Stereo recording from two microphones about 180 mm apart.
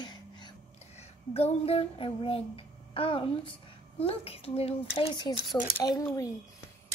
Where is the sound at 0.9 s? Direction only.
35° left (ahead or behind).